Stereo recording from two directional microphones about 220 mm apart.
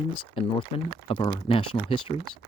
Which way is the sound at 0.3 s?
25° left (ahead or behind).